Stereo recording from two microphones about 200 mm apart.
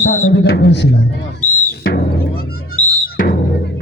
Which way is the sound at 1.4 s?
50° left (ahead or behind).